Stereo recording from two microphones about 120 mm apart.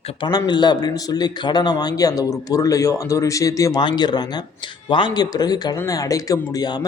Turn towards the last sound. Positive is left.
turn(degrees=35)  # may be behind; listen again after turning